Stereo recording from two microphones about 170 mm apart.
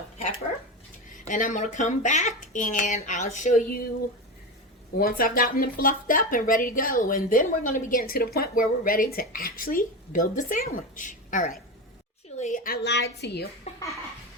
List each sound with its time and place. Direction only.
1.1 s speech: 50° left (ahead or behind)
4.9 s a woman's voice: 55° left (ahead or behind); by 13.5 s 75° left (ahead or behind)